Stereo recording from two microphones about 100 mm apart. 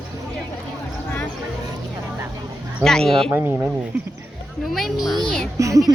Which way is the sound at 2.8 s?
5° left (ahead or behind).